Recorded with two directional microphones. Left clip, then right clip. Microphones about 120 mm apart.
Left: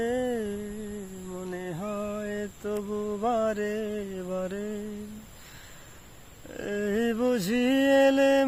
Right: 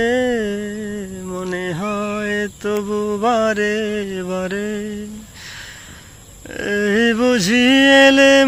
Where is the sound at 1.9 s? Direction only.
30° left (ahead or behind).